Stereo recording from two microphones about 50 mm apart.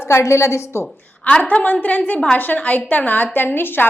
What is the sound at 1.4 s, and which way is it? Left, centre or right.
A woman's voice, left.